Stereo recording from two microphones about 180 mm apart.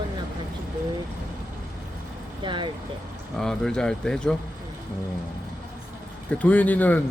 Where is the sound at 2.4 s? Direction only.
25° right (ahead or behind).